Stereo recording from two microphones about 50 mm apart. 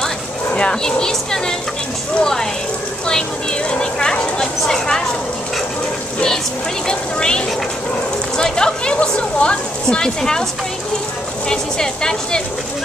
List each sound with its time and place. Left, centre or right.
0.6 s speech: centre
3.8 s speech: centre
6.1 s speech: centre
11.4 s speech: centre